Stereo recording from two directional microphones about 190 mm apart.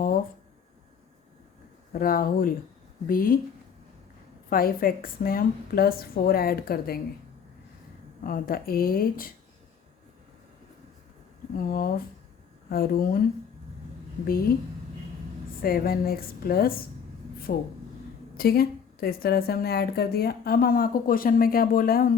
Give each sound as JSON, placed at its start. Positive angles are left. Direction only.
{"t": 1.9, "sound": "a woman's voice", "side_deg": 50}
{"t": 4.4, "sound": "a woman's voice", "side_deg": 50}
{"t": 8.2, "sound": "a woman's voice", "side_deg": 50}
{"t": 11.5, "sound": "a woman's voice", "side_deg": 50}
{"t": 14.3, "sound": "a woman's voice", "side_deg": 50}
{"t": 15.6, "sound": "a woman's voice", "side_deg": 50}